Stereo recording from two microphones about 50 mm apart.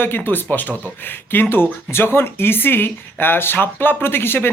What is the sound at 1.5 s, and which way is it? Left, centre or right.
Speech, left.